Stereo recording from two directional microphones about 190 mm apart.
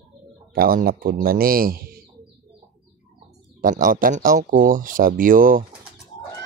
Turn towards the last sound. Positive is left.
turn(degrees=-45)  # may be behind; listen again after turning